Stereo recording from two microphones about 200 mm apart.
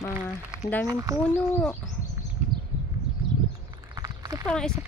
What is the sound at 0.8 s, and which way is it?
Speech, 15° right (ahead or behind).